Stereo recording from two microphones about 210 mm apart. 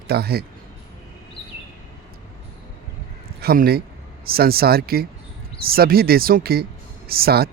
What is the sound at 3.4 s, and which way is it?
A man's voice, 50° right (ahead or behind).